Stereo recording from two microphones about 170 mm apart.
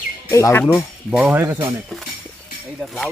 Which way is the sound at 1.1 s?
10° right (ahead or behind).